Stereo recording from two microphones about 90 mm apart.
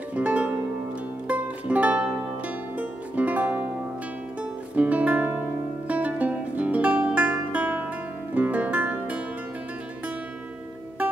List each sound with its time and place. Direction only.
0.1 s music: 15° right (ahead or behind)